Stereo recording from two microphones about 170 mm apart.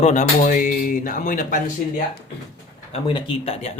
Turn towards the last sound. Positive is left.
turn(degrees=35)  # may be behind; listen again after turning